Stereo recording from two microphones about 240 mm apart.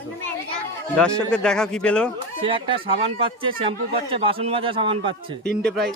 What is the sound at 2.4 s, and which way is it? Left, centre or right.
Speech, right.